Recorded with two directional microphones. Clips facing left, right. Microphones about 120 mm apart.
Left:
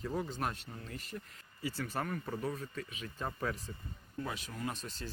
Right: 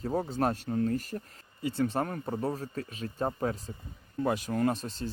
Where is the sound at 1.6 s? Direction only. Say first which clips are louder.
Right 8 dB; 25° right (ahead or behind).